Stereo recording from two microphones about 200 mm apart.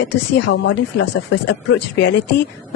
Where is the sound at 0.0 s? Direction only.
60° left (ahead or behind).